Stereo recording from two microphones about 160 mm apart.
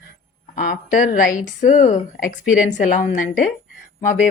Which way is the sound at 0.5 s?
55° left (ahead or behind).